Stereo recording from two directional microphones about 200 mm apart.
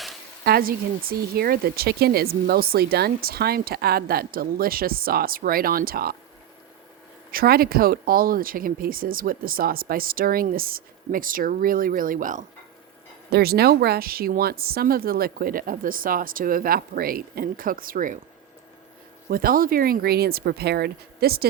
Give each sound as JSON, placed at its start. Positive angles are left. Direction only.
{"t": 0.4, "sound": "speech", "side_deg": -50}
{"t": 7.3, "sound": "speech", "side_deg": -50}
{"t": 19.3, "sound": "speech", "side_deg": -45}